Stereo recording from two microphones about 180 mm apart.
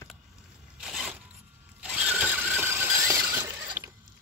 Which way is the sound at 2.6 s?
15° right (ahead or behind).